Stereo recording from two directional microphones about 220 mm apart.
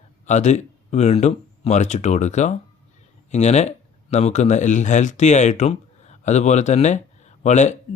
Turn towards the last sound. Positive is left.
turn(degrees=30)  # may be behind; listen again after turning